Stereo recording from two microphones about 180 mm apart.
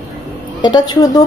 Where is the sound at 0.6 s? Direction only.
25° left (ahead or behind).